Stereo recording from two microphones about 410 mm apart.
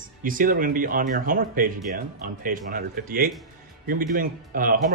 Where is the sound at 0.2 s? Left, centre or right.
Centre.